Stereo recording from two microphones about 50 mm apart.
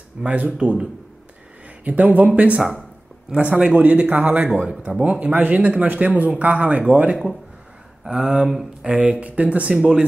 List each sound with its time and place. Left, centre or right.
0.2 s a man's voice: right
1.9 s a man's voice: right
8.0 s a man's voice: centre